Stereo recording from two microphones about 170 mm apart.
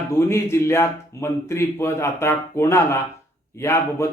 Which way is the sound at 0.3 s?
15° left (ahead or behind).